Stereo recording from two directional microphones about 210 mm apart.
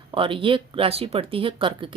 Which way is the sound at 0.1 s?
25° right (ahead or behind).